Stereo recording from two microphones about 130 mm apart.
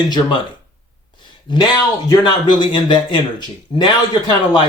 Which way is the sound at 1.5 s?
35° left (ahead or behind).